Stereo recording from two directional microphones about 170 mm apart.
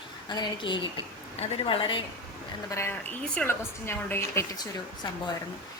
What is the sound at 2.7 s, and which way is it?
A woman's voice, 15° left (ahead or behind).